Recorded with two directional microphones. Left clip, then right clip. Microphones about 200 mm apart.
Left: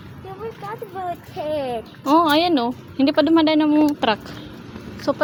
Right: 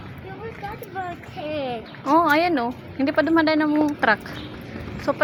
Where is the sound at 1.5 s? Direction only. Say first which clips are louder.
Left 3 dB; 25° left (ahead or behind).